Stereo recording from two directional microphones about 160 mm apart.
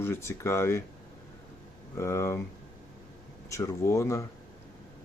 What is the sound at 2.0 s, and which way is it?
Speech, 15° left (ahead or behind).